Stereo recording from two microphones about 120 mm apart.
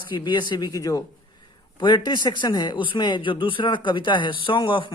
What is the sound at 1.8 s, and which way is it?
A man's voice, 40° left (ahead or behind).